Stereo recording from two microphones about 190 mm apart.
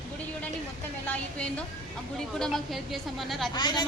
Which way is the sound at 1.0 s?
5° left (ahead or behind).